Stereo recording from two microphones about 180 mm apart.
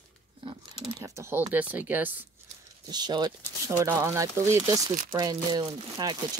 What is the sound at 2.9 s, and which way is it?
Speech, 25° right (ahead or behind).